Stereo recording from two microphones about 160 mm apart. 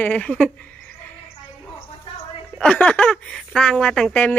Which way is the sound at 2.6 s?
5° left (ahead or behind).